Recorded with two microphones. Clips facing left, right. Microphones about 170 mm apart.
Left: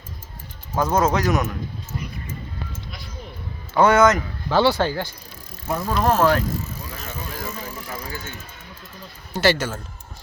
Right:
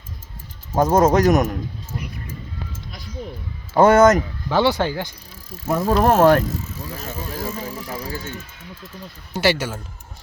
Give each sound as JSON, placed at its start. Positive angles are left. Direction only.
{"t": 0.8, "sound": "speech", "side_deg": -40}
{"t": 3.8, "sound": "a man's voice", "side_deg": -40}
{"t": 4.4, "sound": "speech", "side_deg": -15}
{"t": 6.0, "sound": "speech", "side_deg": -45}
{"t": 6.7, "sound": "bicycle", "side_deg": -25}
{"t": 8.0, "sound": "a man's voice", "side_deg": -30}
{"t": 9.3, "sound": "speech", "side_deg": -10}